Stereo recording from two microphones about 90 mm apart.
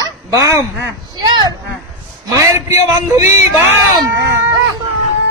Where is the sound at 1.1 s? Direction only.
50° right (ahead or behind).